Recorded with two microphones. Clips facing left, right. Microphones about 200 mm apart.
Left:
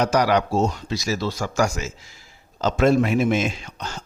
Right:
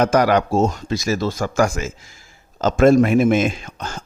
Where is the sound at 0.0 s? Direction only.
50° right (ahead or behind).